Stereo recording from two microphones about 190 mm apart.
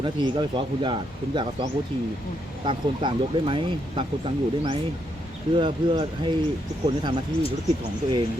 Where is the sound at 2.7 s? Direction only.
25° right (ahead or behind).